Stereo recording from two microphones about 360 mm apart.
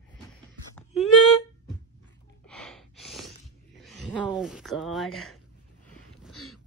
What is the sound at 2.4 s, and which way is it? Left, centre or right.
Gasp, centre.